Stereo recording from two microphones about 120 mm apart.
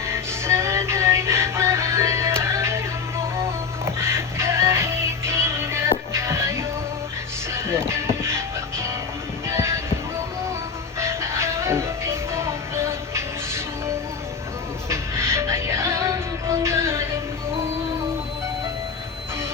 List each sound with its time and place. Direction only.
0.0 s music: 20° right (ahead or behind)
11.0 s music: 25° right (ahead or behind)
14.8 s music: 25° right (ahead or behind)